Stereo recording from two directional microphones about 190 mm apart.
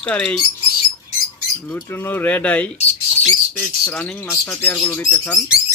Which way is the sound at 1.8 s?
15° left (ahead or behind).